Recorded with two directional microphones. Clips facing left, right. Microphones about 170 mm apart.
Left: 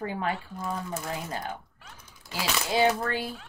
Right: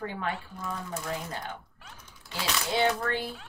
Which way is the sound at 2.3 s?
10° left (ahead or behind).